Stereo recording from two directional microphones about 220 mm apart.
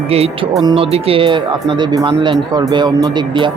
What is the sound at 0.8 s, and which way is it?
Speech, 25° right (ahead or behind).